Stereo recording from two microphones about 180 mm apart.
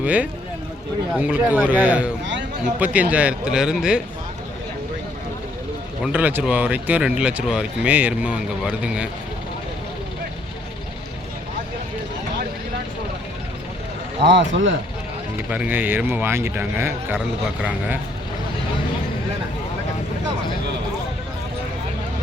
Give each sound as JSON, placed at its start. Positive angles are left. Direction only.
{"t": 0.0, "sound": "speech", "side_deg": -10}
{"t": 6.0, "sound": "speech", "side_deg": -10}
{"t": 14.3, "sound": "speech", "side_deg": -80}
{"t": 15.4, "sound": "speech", "side_deg": -10}